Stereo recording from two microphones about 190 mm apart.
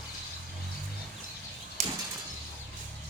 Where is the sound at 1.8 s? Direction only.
45° right (ahead or behind).